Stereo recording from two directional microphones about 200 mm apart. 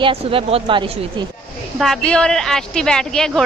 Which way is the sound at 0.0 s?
25° right (ahead or behind).